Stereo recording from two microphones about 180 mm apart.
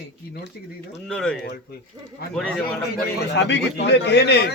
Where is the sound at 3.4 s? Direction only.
75° left (ahead or behind).